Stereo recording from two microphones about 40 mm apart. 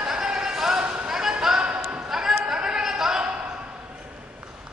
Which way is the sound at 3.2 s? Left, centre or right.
Right.